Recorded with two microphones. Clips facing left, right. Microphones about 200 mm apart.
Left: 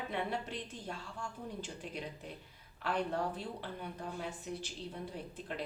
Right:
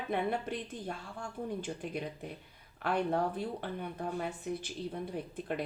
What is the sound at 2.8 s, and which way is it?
Speech, 55° right (ahead or behind).